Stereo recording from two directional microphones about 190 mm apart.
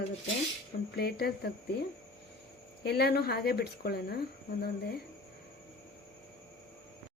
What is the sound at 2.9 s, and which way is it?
Speech, 60° left (ahead or behind).